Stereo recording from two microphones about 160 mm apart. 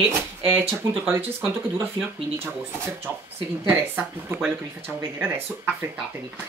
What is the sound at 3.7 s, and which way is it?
Speech, 10° right (ahead or behind).